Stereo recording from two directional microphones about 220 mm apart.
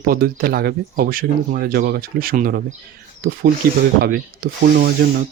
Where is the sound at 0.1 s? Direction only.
40° right (ahead or behind).